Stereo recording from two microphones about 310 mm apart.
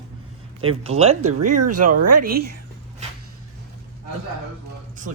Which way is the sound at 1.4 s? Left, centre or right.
Right.